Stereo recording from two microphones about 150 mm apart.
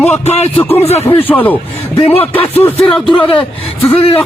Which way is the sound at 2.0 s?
40° left (ahead or behind).